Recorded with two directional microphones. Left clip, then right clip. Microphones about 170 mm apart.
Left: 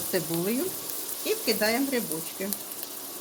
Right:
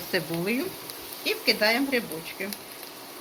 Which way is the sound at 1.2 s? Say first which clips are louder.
Right 3 dB; 50° left (ahead or behind).